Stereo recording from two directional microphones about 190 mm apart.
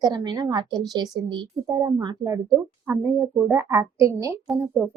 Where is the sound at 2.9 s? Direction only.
10° right (ahead or behind).